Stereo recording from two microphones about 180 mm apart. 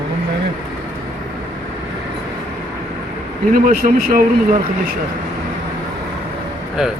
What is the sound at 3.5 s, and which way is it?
Speech, 50° right (ahead or behind).